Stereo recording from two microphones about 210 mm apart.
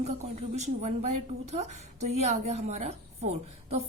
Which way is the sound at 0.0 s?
30° right (ahead or behind).